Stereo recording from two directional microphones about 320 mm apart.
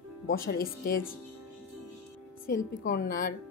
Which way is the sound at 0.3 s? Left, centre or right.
Left.